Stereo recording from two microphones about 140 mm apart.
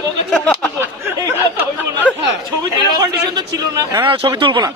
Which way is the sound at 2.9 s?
30° right (ahead or behind).